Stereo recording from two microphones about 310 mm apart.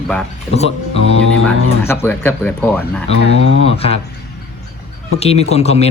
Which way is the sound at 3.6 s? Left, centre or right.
Centre.